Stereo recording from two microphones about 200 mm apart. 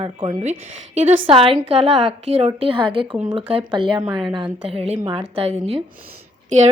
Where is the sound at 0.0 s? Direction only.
30° right (ahead or behind).